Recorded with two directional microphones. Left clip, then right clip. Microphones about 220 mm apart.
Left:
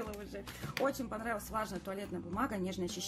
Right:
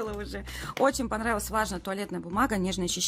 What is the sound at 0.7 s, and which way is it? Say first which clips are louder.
A woman's voice: right 10 dB; 40° right (ahead or behind).